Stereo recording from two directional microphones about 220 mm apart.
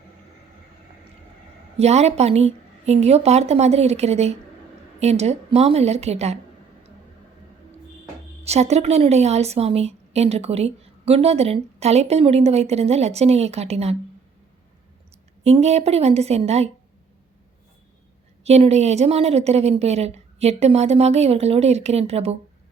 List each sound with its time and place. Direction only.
1.8 s a woman's voice: 30° right (ahead or behind)
8.4 s a woman's voice: 30° right (ahead or behind)
15.4 s a woman's voice: 30° right (ahead or behind)
18.4 s a woman's voice: 30° right (ahead or behind)